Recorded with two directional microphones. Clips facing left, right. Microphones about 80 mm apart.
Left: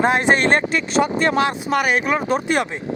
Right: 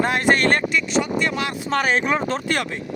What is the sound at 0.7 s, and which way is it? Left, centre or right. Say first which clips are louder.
Speech: left 2 dB; left.